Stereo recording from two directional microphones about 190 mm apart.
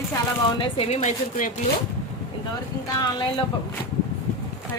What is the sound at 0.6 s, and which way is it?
Speech, 30° left (ahead or behind).